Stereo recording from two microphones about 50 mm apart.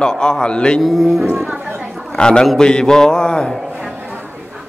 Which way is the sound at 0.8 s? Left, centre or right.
Centre.